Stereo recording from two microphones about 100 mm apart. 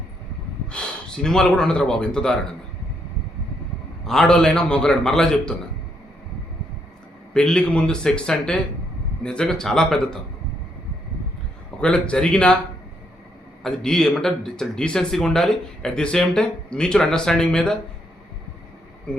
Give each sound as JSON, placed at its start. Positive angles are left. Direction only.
{"t": 0.7, "sound": "speech", "side_deg": 5}
{"t": 4.0, "sound": "a man's voice", "side_deg": 5}
{"t": 7.3, "sound": "a man's voice", "side_deg": 10}
{"t": 11.8, "sound": "a man's voice", "side_deg": 10}
{"t": 13.6, "sound": "speech", "side_deg": 5}